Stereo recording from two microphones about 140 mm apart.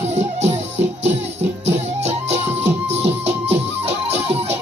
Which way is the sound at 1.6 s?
50° right (ahead or behind).